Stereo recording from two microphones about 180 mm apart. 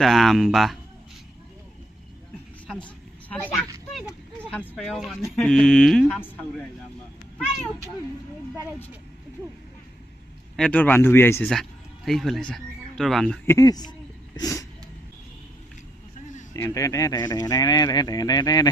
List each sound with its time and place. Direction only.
0.0 s speech: centre (ahead or behind)
3.2 s a sound: 5° left (ahead or behind)
4.5 s speech: 5° left (ahead or behind)
10.6 s speech: 10° left (ahead or behind)
16.6 s speech: 15° left (ahead or behind)